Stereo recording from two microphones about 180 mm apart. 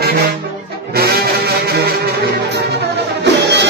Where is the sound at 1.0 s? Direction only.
55° right (ahead or behind).